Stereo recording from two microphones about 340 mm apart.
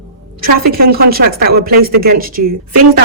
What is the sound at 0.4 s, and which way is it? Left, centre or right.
A woman's voice, right.